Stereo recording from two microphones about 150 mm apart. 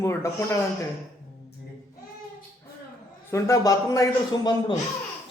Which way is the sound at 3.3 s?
20° left (ahead or behind).